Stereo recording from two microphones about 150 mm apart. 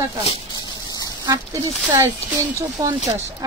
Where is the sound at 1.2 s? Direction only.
25° right (ahead or behind).